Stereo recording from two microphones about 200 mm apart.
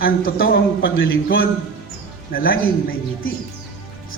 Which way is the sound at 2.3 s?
45° left (ahead or behind).